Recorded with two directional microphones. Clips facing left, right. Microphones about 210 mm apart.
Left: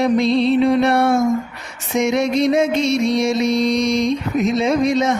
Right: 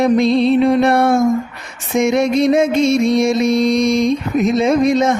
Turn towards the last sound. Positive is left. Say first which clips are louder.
# right 3 dB
turn(degrees=-50)  # may be behind; listen again after turning